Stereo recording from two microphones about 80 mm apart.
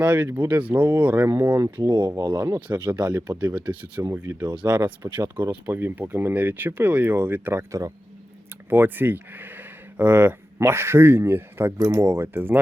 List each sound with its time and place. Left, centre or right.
0.0 s speech: centre
2.1 s speech: right
2.6 s speech: centre
3.1 s speech: right
3.5 s speech: centre
4.1 s speech: right
4.6 s speech: right
5.4 s speech: right
7.7 s speech: right
8.7 s speech: right
11.8 s speech: right